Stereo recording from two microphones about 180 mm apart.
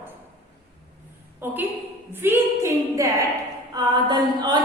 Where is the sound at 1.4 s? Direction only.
10° right (ahead or behind).